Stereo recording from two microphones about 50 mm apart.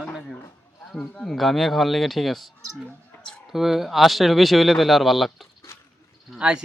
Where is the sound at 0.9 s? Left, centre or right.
Centre.